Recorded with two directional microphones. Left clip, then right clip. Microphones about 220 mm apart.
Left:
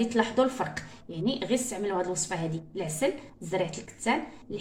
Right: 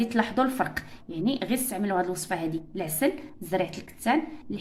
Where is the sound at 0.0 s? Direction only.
45° right (ahead or behind).